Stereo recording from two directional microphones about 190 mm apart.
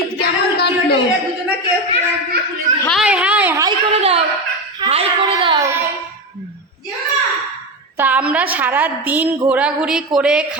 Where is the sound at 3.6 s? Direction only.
30° right (ahead or behind).